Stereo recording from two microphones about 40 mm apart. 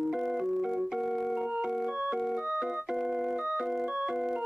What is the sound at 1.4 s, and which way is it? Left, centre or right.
Organ, centre.